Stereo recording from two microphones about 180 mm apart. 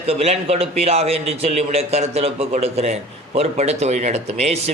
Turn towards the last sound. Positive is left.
turn(degrees=-35)  # may be behind; listen again after turning